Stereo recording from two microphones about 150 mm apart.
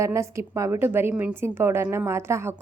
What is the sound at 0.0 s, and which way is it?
A woman's voice, 20° right (ahead or behind).